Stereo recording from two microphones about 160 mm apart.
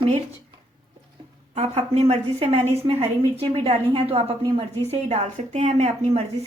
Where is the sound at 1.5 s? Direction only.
40° right (ahead or behind).